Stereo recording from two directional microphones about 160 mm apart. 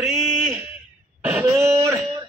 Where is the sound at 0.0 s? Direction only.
Centre (ahead or behind).